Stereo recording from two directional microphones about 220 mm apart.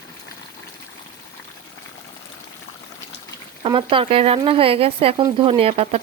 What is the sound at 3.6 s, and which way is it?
Speech, 20° right (ahead or behind).